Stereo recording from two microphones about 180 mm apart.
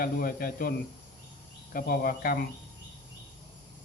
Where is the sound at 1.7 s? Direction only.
55° left (ahead or behind).